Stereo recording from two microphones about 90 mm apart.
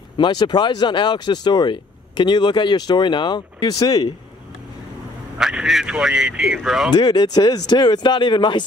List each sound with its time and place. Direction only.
0.2 s speech: 50° left (ahead or behind)
5.4 s speech: 5° right (ahead or behind)
6.9 s speech: 55° left (ahead or behind)